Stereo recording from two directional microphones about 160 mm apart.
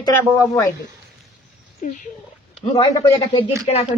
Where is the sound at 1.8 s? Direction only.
60° left (ahead or behind).